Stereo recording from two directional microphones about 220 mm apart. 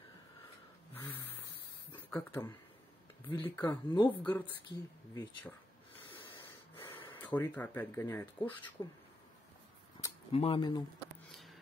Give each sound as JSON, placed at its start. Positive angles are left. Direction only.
{"t": 0.9, "sound": "a sound", "side_deg": 10}
{"t": 2.0, "sound": "speech", "side_deg": 10}
{"t": 3.6, "sound": "speech", "side_deg": 20}
{"t": 4.1, "sound": "speech", "side_deg": 5}
{"t": 6.1, "sound": "a sound", "side_deg": 20}
{"t": 7.1, "sound": "speech", "side_deg": 10}
{"t": 10.3, "sound": "speech", "side_deg": 25}